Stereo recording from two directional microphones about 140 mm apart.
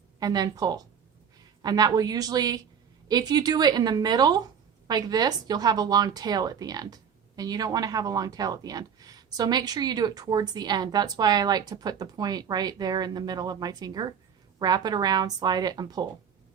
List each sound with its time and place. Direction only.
0.2 s a woman's voice: 30° right (ahead or behind)